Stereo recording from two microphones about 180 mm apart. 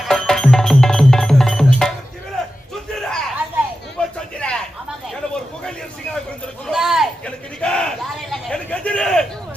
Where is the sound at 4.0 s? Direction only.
5° left (ahead or behind).